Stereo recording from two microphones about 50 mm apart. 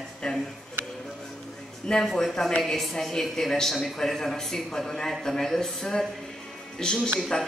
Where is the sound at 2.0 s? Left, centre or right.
Centre.